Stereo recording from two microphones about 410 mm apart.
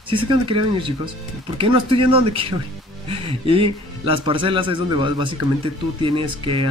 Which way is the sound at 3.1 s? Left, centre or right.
Centre.